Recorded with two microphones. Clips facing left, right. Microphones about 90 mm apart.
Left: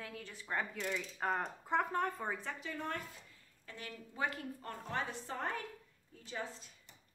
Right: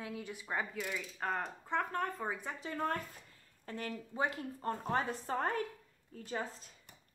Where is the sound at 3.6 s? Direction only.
45° right (ahead or behind).